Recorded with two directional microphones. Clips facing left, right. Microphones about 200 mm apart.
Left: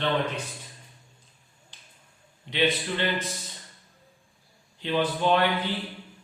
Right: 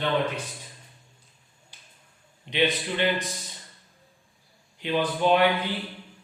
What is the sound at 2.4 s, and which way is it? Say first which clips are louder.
Speech: even; 15° right (ahead or behind).